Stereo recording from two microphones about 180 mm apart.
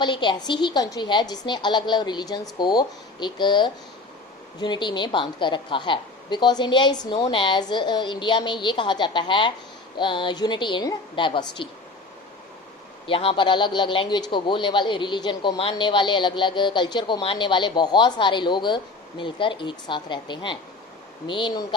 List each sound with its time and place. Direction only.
0.0 s a man's voice: 25° left (ahead or behind)
13.1 s a man's voice: 30° left (ahead or behind)